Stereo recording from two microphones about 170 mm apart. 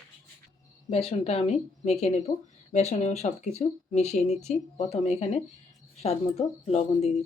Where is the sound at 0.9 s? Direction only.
35° left (ahead or behind).